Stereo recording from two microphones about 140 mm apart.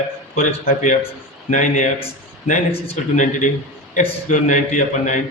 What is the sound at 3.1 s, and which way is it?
A man's voice, 65° left (ahead or behind).